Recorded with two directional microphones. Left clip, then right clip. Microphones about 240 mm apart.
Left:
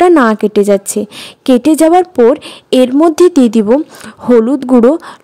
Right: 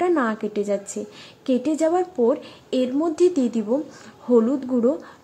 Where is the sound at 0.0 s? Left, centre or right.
Left.